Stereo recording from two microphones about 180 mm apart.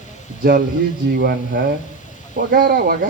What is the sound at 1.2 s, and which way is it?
Speech, 65° right (ahead or behind).